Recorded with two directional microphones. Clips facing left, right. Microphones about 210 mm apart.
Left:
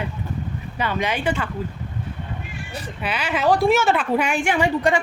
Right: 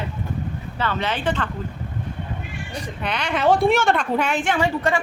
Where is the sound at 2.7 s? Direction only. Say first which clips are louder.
Even; 5° left (ahead or behind).